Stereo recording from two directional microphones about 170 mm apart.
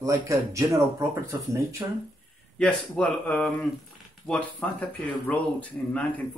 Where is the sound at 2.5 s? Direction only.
5° left (ahead or behind).